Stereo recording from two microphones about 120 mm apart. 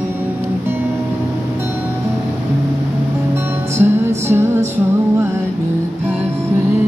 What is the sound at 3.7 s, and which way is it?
Music, 20° right (ahead or behind).